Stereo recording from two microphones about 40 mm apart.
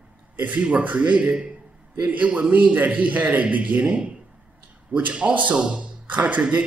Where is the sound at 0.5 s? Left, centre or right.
Right.